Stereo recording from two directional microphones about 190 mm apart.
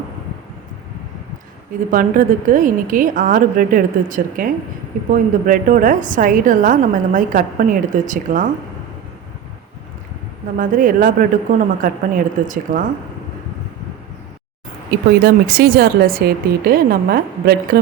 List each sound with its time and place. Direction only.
1.9 s a woman's voice: 45° right (ahead or behind)
10.6 s a woman's voice: 45° right (ahead or behind)
14.8 s a woman's voice: 50° right (ahead or behind)